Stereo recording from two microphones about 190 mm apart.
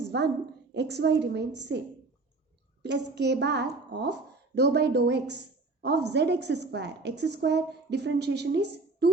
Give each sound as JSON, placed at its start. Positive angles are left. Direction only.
{"t": 0.0, "sound": "a sound", "side_deg": -65}
{"t": 0.7, "sound": "a woman's voice", "side_deg": -65}
{"t": 2.8, "sound": "a woman's voice", "side_deg": -65}